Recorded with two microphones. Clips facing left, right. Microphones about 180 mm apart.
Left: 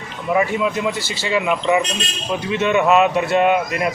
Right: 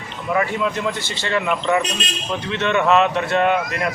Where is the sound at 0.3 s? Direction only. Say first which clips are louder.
Left 2 dB; 10° left (ahead or behind).